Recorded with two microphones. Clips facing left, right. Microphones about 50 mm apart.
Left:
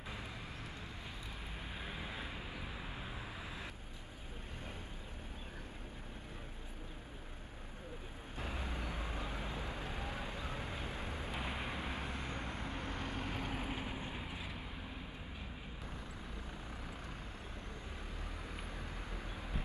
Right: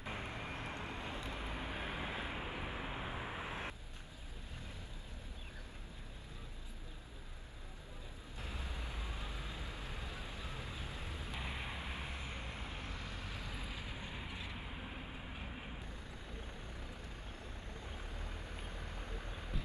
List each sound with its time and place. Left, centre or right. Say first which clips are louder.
0.1 s vehicle: right 5 dB; right
1.9 s vehicle: right 3 dB; centre
8.4 s vehicle: left 5 dB; left
11.3 s vehicle: left 2 dB; left
14.1 s vehicle: left 1 dB; centre